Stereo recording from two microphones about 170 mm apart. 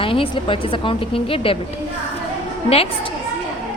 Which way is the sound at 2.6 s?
35° left (ahead or behind).